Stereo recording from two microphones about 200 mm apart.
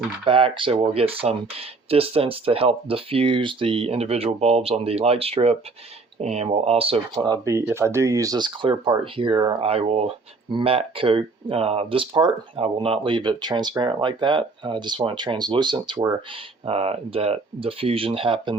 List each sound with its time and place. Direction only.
0.3 s speech: 25° right (ahead or behind)